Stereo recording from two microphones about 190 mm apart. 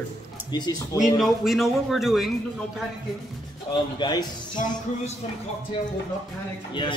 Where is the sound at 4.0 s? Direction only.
20° left (ahead or behind).